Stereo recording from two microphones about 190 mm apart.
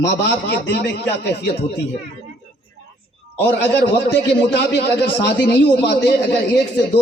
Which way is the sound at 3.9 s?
55° left (ahead or behind).